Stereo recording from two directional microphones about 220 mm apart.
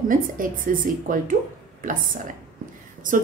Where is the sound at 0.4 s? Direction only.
40° right (ahead or behind).